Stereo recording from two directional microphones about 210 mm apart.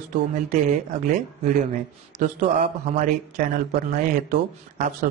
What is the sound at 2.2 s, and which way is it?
Speech, 40° right (ahead or behind).